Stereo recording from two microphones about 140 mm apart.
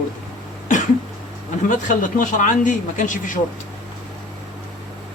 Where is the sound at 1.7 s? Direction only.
70° left (ahead or behind).